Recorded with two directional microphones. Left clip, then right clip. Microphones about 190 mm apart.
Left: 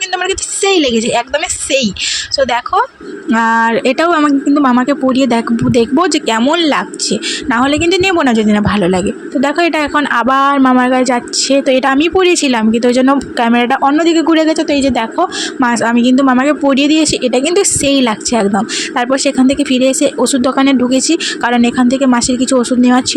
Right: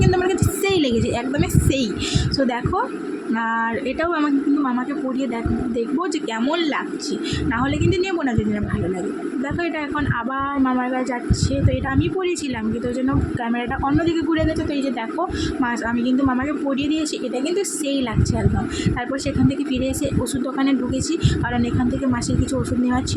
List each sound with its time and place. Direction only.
0.1 s a man's voice: 45° left (ahead or behind)